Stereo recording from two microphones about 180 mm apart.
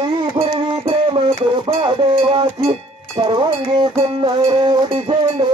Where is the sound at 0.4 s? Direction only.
30° right (ahead or behind).